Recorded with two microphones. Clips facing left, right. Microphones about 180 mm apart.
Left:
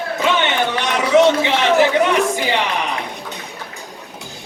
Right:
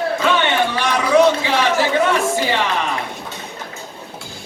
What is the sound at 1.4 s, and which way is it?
Speech, 20° left (ahead or behind).